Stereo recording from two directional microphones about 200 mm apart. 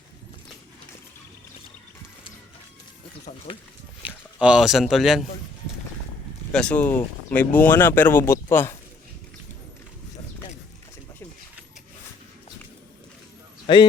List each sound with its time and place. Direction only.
4.0 s speech: 5° right (ahead or behind)
6.5 s speech: 5° left (ahead or behind)
13.7 s speech: 25° left (ahead or behind)